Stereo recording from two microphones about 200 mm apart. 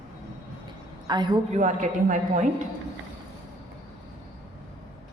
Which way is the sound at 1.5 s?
40° right (ahead or behind).